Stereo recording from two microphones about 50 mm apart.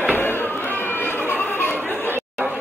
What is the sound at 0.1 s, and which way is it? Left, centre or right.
Chatter, left.